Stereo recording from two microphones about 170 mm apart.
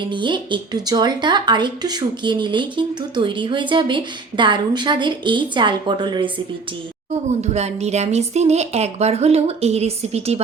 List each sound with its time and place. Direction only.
0.0 s speech: 30° right (ahead or behind)
7.3 s a woman's voice: 40° right (ahead or behind)